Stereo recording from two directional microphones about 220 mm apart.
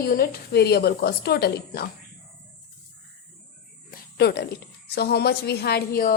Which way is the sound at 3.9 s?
50° left (ahead or behind).